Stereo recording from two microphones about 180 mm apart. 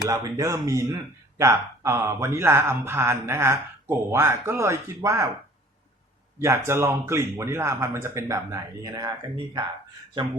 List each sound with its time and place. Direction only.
0.1 s speech: 20° right (ahead or behind)
6.4 s speech: 15° right (ahead or behind)